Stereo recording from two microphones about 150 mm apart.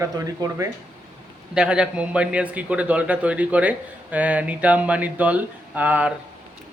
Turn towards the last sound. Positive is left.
turn(degrees=-10)  # may be behind; listen again after turning